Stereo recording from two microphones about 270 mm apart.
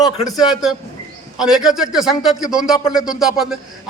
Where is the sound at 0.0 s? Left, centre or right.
Centre.